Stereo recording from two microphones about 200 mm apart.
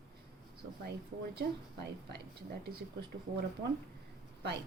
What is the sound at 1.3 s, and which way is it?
Speech, 55° right (ahead or behind).